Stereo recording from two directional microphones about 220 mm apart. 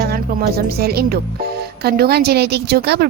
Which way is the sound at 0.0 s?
45° right (ahead or behind).